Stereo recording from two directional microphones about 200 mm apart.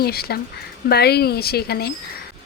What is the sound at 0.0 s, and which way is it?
Speech, 50° left (ahead or behind).